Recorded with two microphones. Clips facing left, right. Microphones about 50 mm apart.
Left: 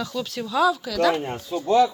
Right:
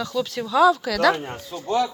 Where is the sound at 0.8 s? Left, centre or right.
Right.